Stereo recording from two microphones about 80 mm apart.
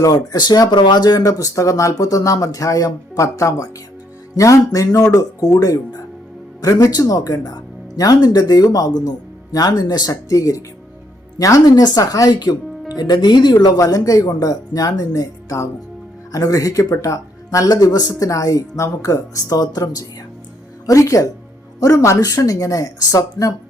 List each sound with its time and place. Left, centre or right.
0.0 s speech: left
13.0 s speech: left
13.7 s speech: left
18.1 s speech: left